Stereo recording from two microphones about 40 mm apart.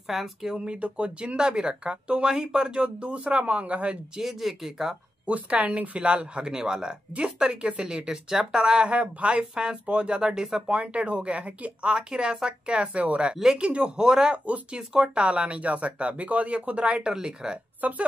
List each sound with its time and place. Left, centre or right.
0.1 s speech: centre
0.7 s speech: right
4.2 s speech: centre
5.2 s speech: right
5.9 s speech: right
8.9 s speech: right; by 10.6 s centre
10.7 s speech: right
11.9 s speech: right
13.3 s speech: centre
13.6 s speech: right
13.9 s speech: centre
14.3 s speech: right
17.1 s speech: centre
17.8 s speech: right